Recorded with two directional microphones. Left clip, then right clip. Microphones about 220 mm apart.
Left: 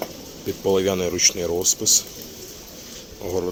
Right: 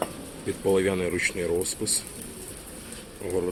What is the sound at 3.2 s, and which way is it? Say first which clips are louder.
Speech: left 3 dB; 15° left (ahead or behind).